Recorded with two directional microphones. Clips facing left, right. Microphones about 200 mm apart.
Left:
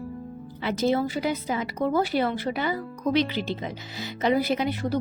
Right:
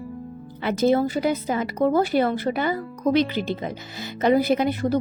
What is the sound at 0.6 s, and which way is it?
Speech, 50° right (ahead or behind).